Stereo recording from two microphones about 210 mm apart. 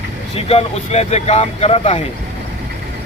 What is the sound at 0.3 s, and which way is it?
Speech, 30° left (ahead or behind).